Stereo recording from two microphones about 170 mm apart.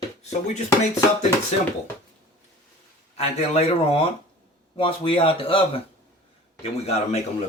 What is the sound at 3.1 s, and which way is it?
Speech, 35° left (ahead or behind).